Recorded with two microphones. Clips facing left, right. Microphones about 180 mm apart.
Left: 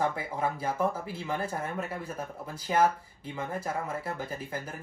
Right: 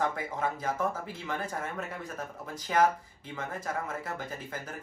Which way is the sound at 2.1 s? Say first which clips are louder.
Left 1 dB; 10° left (ahead or behind).